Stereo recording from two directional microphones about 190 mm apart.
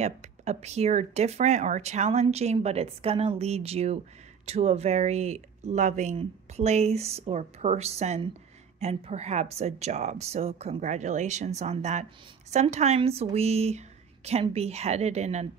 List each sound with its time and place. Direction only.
0.0 s speech: 35° right (ahead or behind)